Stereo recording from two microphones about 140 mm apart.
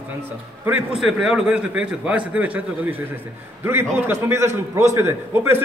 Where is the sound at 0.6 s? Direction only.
10° right (ahead or behind).